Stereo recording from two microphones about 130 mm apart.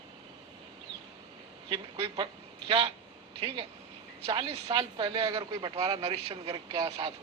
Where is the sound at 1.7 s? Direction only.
40° right (ahead or behind).